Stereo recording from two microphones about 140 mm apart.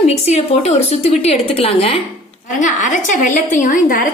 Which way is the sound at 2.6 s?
65° left (ahead or behind).